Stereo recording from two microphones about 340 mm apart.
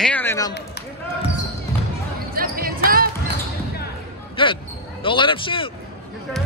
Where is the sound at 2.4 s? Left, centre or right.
Right.